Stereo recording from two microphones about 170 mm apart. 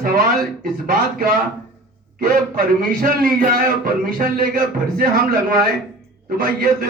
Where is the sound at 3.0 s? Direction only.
60° right (ahead or behind).